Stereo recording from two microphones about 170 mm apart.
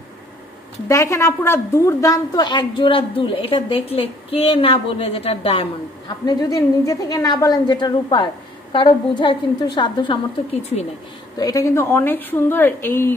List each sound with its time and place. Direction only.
0.8 s a woman's voice: 15° left (ahead or behind); by 10.9 s 35° left (ahead or behind)
11.3 s a woman's voice: 20° left (ahead or behind)